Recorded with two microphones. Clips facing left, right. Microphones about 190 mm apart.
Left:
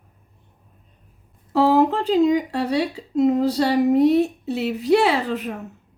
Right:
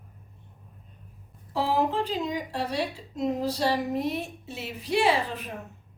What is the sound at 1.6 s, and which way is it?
Speech, 70° left (ahead or behind).